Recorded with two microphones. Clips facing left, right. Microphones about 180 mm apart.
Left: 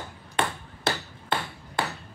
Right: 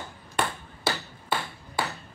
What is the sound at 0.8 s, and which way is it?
Hammer, 20° left (ahead or behind).